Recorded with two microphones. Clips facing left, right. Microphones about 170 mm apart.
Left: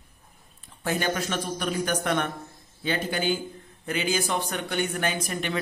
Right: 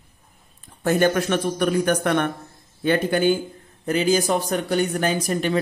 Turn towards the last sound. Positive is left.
turn(degrees=-35)  # may be behind; listen again after turning